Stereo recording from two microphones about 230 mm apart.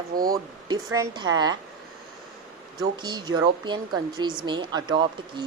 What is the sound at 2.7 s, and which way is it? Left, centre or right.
Speech, centre.